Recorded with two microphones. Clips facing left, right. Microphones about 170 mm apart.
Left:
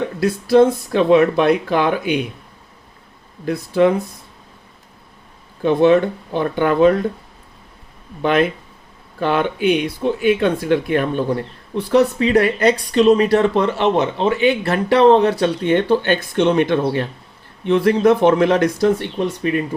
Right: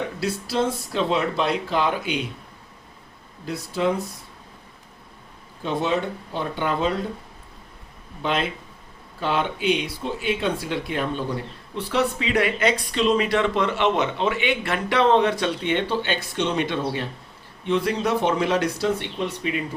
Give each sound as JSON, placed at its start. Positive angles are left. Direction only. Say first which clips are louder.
{"t": 0.2, "sound": "speech", "louder": "left 13 dB", "side_deg": 50}
{"t": 3.4, "sound": "speech", "louder": "left 9 dB", "side_deg": 60}
{"t": 5.6, "sound": "speech", "louder": "left 11 dB", "side_deg": 60}
{"t": 8.2, "sound": "speech", "louder": "left 9 dB", "side_deg": 60}
{"t": 11.9, "sound": "speech", "louder": "left 9 dB", "side_deg": 40}